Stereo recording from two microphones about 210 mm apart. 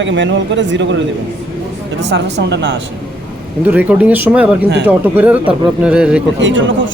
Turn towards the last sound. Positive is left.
turn(degrees=-60)  # may be behind; listen again after turning